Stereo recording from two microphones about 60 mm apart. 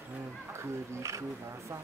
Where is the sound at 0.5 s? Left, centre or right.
Right.